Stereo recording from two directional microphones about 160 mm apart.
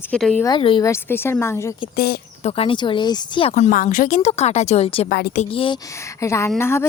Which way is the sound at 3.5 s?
55° left (ahead or behind).